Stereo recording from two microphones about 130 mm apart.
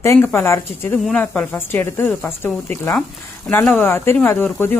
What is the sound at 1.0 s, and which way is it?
Speech, 10° left (ahead or behind).